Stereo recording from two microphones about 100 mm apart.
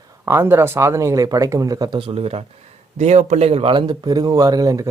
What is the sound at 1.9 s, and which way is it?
Speech, 65° right (ahead or behind).